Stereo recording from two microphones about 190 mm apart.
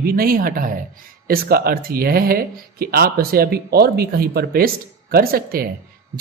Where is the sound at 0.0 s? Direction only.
50° right (ahead or behind).